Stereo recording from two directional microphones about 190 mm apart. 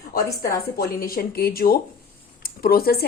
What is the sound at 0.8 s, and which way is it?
Speech, 50° left (ahead or behind).